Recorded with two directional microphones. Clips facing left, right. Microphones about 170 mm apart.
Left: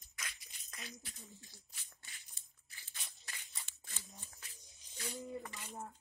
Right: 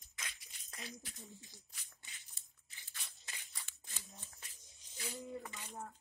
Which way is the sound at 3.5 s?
20° left (ahead or behind).